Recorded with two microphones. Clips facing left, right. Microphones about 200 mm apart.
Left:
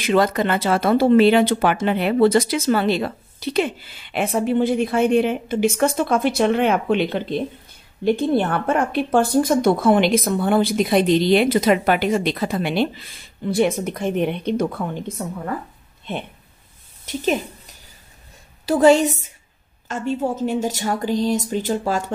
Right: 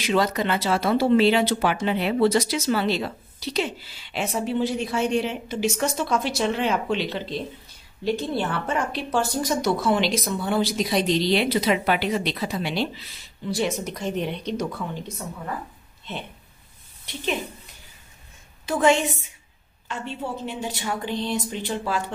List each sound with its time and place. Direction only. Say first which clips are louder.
0.0 s a woman's voice: left 4 dB; 55° left (ahead or behind)
17.0 s a woman's voice: left 7 dB; 45° left (ahead or behind)
18.7 s a woman's voice: left 6 dB; 35° left (ahead or behind)